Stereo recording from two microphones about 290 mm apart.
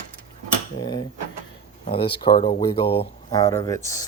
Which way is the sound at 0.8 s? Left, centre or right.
Centre.